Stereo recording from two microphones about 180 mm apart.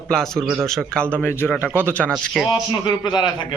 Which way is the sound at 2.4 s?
25° left (ahead or behind).